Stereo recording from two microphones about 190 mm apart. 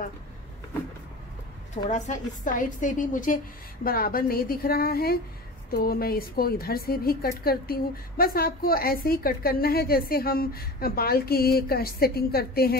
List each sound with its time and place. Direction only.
1.9 s a woman's voice: 40° left (ahead or behind); by 12.7 s 55° left (ahead or behind)